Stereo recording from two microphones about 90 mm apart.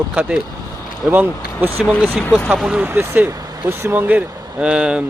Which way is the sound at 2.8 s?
20° right (ahead or behind).